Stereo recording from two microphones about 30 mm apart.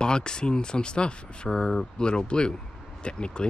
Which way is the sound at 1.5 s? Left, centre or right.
Centre.